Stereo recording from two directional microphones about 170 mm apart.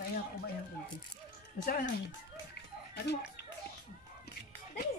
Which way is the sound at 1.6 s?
55° left (ahead or behind).